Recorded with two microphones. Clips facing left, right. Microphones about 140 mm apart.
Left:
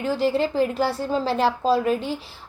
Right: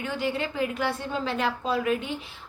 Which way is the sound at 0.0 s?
35° left (ahead or behind).